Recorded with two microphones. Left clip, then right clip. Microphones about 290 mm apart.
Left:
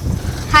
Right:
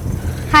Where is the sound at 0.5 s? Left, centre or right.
Centre.